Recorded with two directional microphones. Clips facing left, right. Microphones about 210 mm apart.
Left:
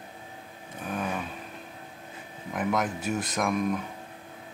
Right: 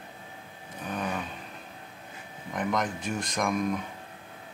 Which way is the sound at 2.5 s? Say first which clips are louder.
Left 1 dB; 5° left (ahead or behind).